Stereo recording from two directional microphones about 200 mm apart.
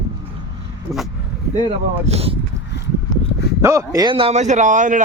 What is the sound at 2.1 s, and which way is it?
Speech, 30° right (ahead or behind).